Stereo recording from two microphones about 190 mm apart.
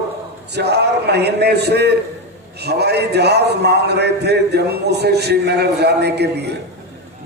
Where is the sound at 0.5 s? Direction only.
60° right (ahead or behind).